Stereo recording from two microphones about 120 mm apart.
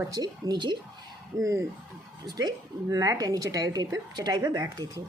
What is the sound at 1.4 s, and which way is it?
A woman's voice, 25° right (ahead or behind).